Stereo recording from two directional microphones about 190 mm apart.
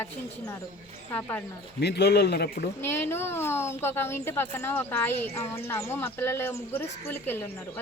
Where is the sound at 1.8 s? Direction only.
60° left (ahead or behind).